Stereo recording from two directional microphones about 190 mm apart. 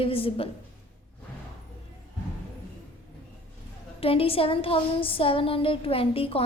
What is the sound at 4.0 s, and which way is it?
A woman's voice, 30° left (ahead or behind).